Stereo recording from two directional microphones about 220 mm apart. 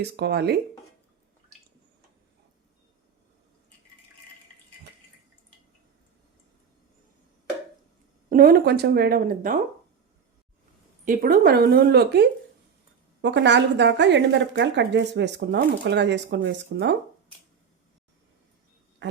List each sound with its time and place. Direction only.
0.0 s speech: 45° right (ahead or behind)
8.3 s speech: 40° right (ahead or behind)
11.0 s speech: 40° right (ahead or behind)